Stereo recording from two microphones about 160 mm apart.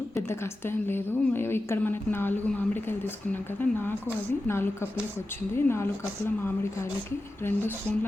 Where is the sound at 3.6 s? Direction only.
10° left (ahead or behind).